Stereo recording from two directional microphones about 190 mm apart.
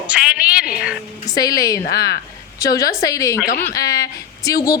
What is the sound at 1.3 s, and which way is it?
A woman's voice, 20° left (ahead or behind).